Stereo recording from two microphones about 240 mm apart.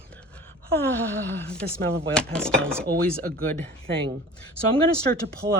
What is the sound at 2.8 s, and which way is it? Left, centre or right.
Speech, right.